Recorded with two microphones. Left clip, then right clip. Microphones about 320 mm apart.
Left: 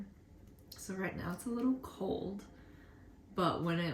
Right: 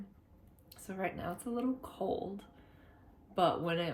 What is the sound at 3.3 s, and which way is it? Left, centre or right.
Speech, centre.